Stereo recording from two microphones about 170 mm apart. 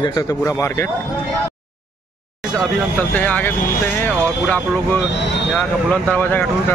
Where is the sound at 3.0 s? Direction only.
10° left (ahead or behind).